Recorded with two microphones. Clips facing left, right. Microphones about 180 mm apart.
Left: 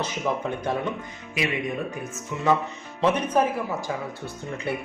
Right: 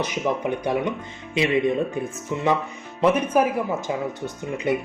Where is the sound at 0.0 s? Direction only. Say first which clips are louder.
Right 3 dB; 15° right (ahead or behind).